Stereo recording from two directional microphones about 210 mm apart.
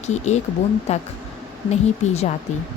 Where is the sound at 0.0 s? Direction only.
30° left (ahead or behind).